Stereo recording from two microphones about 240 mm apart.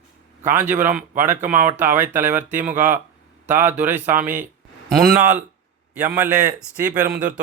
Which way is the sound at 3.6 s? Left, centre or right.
Centre.